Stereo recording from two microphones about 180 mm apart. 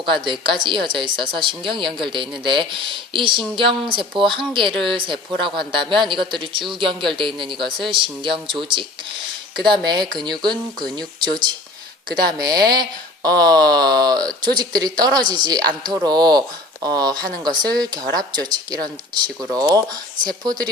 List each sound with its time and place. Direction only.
0.0 s speech: 25° right (ahead or behind)